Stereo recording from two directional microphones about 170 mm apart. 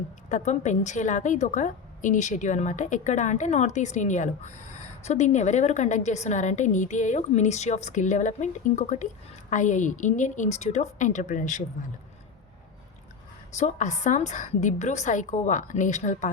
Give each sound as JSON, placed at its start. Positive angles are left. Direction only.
{"t": 0.3, "sound": "a woman's voice", "side_deg": 45}
{"t": 13.5, "sound": "a woman's voice", "side_deg": 45}